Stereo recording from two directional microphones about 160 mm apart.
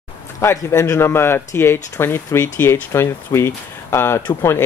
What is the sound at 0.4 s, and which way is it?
Speech, 15° left (ahead or behind).